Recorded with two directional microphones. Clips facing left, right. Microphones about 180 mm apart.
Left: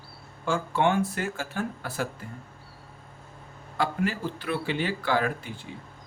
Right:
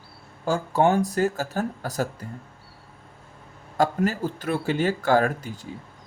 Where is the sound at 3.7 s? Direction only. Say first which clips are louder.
Right 5 dB; 45° right (ahead or behind).